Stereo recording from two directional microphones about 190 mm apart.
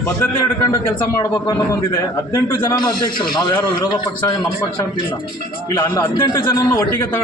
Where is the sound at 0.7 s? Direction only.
15° left (ahead or behind).